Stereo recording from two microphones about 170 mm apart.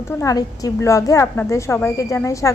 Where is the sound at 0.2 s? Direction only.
20° left (ahead or behind).